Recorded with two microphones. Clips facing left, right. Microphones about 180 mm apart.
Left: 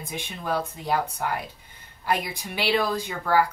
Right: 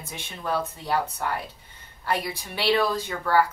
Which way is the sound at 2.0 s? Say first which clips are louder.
Left 1 dB; 15° left (ahead or behind).